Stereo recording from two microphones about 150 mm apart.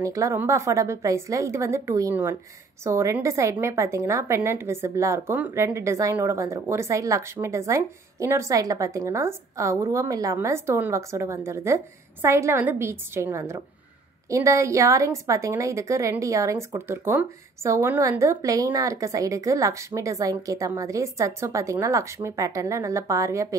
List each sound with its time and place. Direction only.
0.0 s speech: 20° right (ahead or behind)